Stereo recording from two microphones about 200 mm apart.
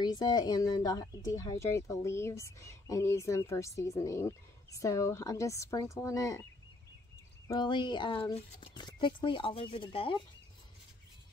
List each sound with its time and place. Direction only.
0.0 s speech: 20° left (ahead or behind)
7.4 s speech: 20° left (ahead or behind)